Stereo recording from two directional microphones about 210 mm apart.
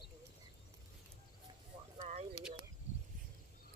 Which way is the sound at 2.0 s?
30° right (ahead or behind).